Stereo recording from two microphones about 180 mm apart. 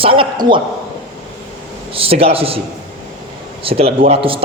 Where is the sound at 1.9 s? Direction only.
30° right (ahead or behind).